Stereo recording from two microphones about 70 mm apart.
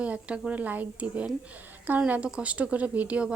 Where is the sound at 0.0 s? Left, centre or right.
Centre.